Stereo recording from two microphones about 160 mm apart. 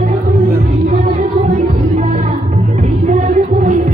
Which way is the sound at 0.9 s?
50° right (ahead or behind).